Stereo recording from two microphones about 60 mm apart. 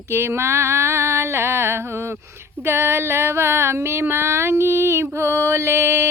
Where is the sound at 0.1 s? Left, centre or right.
Right.